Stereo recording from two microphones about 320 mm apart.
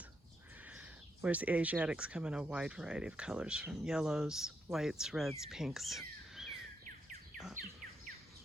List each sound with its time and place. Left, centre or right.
0.6 s speech: centre